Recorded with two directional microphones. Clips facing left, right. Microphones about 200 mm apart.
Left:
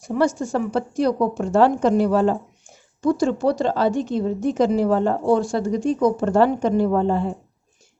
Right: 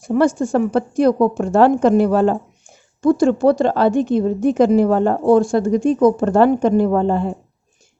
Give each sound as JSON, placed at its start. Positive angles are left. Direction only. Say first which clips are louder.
{"t": 0.0, "sound": "a woman's voice", "louder": "right 5 dB", "side_deg": -50}